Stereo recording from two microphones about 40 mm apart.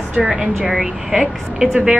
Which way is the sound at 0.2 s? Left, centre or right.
Centre.